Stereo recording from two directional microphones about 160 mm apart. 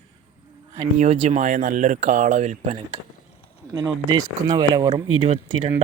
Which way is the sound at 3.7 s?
20° right (ahead or behind).